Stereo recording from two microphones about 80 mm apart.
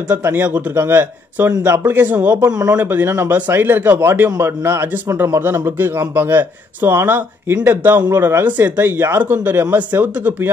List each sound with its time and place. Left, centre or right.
0.1 s a man's voice: right